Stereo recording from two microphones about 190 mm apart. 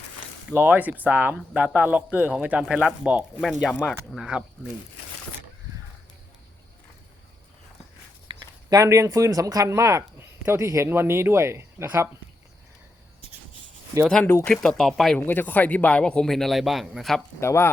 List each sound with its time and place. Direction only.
0.5 s speech: 10° right (ahead or behind)
8.3 s speech: 15° right (ahead or behind)
14.3 s speech: 15° left (ahead or behind)
14.5 s speech: 5° left (ahead or behind)
17.4 s speech: 15° left (ahead or behind)